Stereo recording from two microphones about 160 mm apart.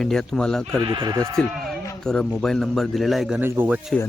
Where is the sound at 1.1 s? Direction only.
15° right (ahead or behind).